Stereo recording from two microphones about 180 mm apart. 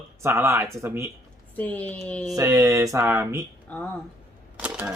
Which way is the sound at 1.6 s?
10° left (ahead or behind).